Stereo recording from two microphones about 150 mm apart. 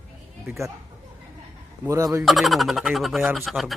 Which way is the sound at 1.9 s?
20° right (ahead or behind).